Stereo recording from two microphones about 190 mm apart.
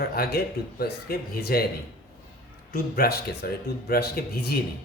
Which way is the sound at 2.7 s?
55° left (ahead or behind).